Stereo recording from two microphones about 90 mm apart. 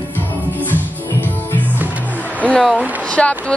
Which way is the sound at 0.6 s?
20° left (ahead or behind).